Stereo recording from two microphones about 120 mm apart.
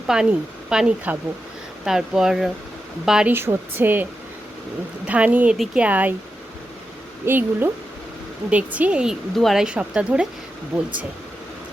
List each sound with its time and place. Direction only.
0.1 s speech: 5° right (ahead or behind)
3.3 s speech: 20° right (ahead or behind)
5.0 s speech: 10° right (ahead or behind)
7.3 s speech: 15° right (ahead or behind)